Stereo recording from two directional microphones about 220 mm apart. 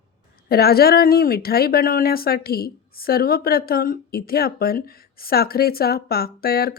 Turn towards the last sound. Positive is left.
turn(degrees=45)  # may be behind; listen again after turning